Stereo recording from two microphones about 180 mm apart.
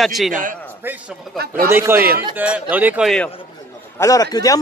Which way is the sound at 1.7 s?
10° right (ahead or behind).